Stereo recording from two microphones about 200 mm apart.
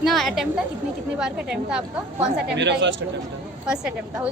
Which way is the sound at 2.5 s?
60° right (ahead or behind).